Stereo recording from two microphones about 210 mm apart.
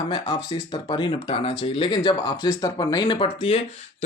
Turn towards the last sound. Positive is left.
turn(degrees=25)  # may be behind; listen again after turning